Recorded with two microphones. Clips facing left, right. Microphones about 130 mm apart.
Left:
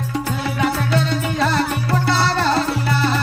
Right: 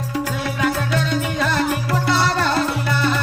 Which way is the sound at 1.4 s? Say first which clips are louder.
Left 2 dB; 30° left (ahead or behind).